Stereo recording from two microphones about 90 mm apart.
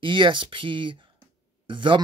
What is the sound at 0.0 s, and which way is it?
Speech, 65° right (ahead or behind).